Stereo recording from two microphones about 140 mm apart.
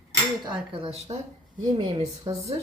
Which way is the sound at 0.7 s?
45° right (ahead or behind).